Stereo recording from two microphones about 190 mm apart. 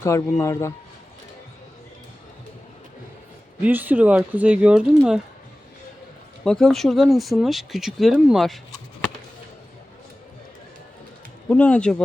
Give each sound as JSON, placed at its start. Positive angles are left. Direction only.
{"t": 0.0, "sound": "speech", "side_deg": 15}
{"t": 3.6, "sound": "speech", "side_deg": -10}
{"t": 6.4, "sound": "speech", "side_deg": 5}
{"t": 11.4, "sound": "speech", "side_deg": 5}